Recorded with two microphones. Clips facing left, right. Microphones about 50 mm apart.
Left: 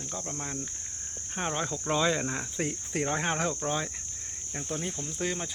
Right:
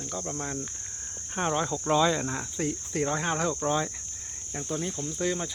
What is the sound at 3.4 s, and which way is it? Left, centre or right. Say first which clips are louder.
Speech: right 3 dB; centre.